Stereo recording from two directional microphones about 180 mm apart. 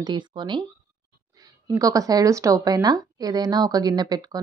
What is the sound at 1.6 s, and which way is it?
Speech, 20° right (ahead or behind).